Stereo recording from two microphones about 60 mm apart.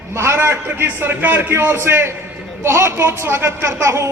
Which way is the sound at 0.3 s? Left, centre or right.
Right.